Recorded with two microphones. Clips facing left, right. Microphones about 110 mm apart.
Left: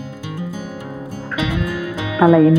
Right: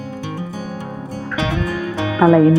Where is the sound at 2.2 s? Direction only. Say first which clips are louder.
Even; centre (ahead or behind).